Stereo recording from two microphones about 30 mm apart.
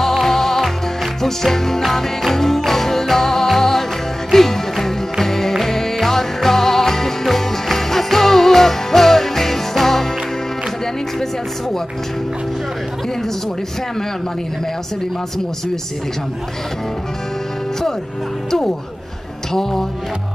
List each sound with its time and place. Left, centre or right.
0.0 s music: centre
18.5 s music: centre